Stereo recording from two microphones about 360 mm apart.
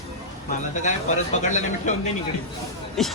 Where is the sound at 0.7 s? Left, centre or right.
Left.